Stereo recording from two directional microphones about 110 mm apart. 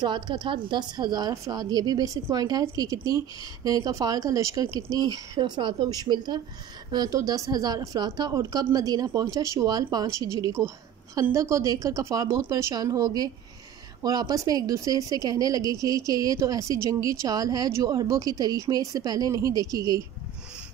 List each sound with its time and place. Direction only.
0.0 s a woman's voice: 45° right (ahead or behind)